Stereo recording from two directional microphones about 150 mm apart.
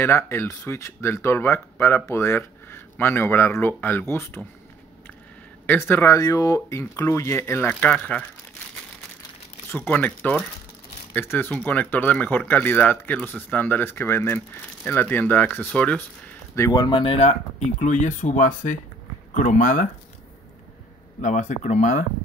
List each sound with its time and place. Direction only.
0.0 s speech: 15° left (ahead or behind)
5.7 s speech: 15° left (ahead or behind)
9.7 s speech: 10° left (ahead or behind); by 19.9 s 60° left (ahead or behind)
21.2 s speech: 55° left (ahead or behind)